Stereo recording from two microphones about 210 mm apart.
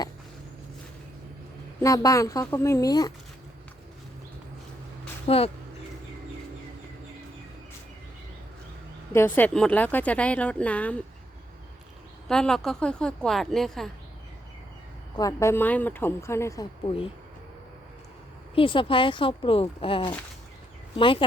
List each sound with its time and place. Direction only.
1.8 s speech: 15° left (ahead or behind)
5.3 s speech: 30° left (ahead or behind)
9.1 s speech: 10° left (ahead or behind)
12.3 s speech: 5° left (ahead or behind)
15.1 s speech: 15° left (ahead or behind)
18.5 s speech: 25° left (ahead or behind)